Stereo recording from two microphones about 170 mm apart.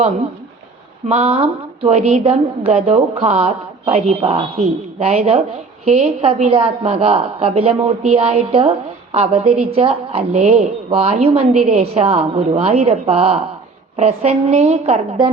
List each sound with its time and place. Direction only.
1.0 s a woman's voice: 40° right (ahead or behind)